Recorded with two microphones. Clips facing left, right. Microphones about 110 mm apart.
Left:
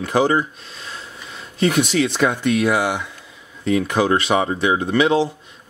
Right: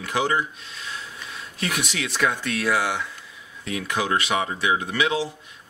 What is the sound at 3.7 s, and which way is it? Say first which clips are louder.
Speech: left 8 dB; 35° left (ahead or behind).